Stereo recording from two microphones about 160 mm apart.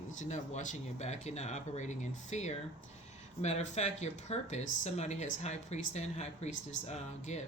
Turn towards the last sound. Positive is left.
turn(degrees=45)  # may be behind; listen again after turning